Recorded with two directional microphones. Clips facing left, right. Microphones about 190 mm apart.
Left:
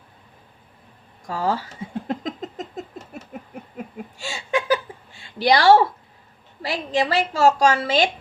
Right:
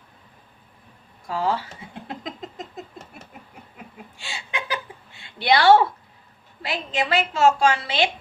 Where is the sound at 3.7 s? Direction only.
45° left (ahead or behind).